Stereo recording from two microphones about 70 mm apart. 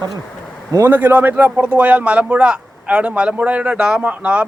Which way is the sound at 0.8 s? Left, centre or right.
Right.